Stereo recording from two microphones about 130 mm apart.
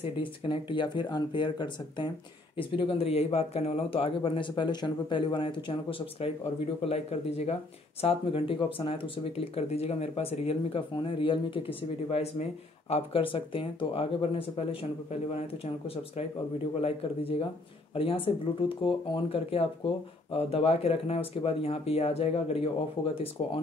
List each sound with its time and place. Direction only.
0.0 s speech: 40° left (ahead or behind)
6.8 s speech: 55° left (ahead or behind)
12.1 s speech: 50° left (ahead or behind)
16.8 s speech: 45° left (ahead or behind)